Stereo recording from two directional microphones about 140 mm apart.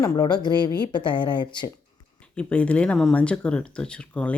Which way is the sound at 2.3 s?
10° left (ahead or behind).